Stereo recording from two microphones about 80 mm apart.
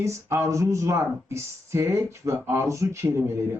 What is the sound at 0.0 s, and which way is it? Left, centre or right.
Speech, right.